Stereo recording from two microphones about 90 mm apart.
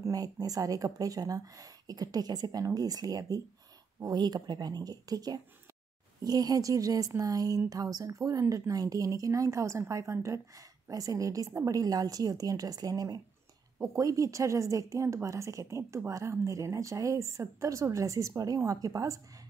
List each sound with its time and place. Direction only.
0.1 s a woman's voice: 45° right (ahead or behind)